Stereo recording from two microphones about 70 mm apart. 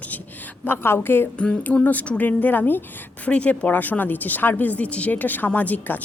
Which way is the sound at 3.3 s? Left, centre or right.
Centre.